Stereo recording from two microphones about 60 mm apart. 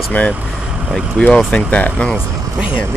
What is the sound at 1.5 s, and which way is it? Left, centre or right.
Speech, left.